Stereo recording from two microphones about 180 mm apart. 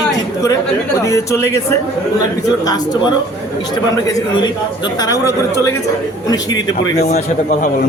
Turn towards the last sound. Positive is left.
turn(degrees=20)  # may be behind; listen again after turning